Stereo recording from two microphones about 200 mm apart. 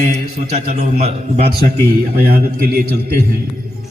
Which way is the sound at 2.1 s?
50° right (ahead or behind).